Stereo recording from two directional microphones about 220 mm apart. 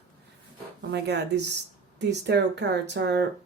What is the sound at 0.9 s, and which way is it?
Speech, 50° right (ahead or behind).